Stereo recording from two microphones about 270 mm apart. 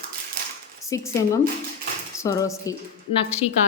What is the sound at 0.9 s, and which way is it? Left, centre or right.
Speech, centre.